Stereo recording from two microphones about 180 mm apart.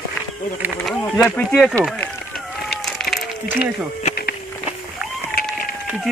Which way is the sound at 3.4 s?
45° left (ahead or behind).